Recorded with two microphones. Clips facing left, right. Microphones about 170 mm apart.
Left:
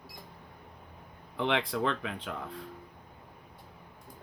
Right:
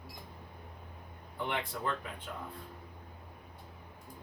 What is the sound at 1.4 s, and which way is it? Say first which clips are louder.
Speech: left 7 dB; 90° left.